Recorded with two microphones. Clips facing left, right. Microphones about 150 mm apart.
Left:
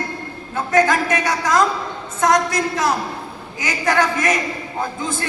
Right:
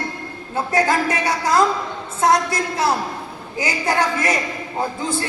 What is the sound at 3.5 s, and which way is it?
Speech, 30° right (ahead or behind).